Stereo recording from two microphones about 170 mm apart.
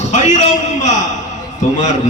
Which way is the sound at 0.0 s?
45° left (ahead or behind).